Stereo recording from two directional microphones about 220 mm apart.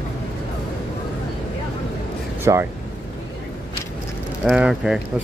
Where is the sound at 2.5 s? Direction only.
15° right (ahead or behind).